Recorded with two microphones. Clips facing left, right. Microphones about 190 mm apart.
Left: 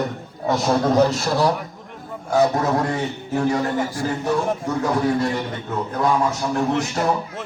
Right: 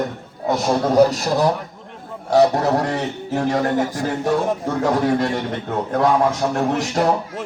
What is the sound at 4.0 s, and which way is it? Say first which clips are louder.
Speech: right 2 dB; 45° right (ahead or behind).